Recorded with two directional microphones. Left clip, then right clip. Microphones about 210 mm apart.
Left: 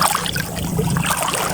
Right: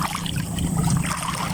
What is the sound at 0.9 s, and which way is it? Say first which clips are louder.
Boat: left 10 dB; 50° left (ahead or behind).